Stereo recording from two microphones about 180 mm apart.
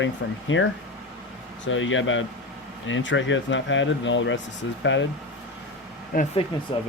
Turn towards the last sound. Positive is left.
turn(degrees=30)  # may be behind; listen again after turning